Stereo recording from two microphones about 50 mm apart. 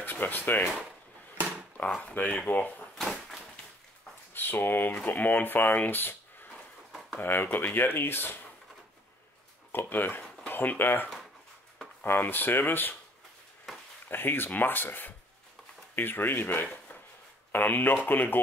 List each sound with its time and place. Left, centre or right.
0.0 s speech: left
2.0 s speech: left
3.0 s a sound: centre
4.3 s speech: left
7.2 s speech: left
9.7 s speech: left
13.7 s a sound: centre
14.0 s speech: left